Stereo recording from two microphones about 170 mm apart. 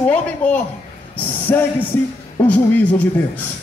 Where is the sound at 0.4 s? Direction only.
10° left (ahead or behind).